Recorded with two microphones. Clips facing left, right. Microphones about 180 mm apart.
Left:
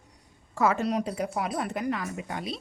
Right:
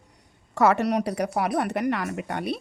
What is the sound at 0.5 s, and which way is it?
A woman's voice, 70° right (ahead or behind).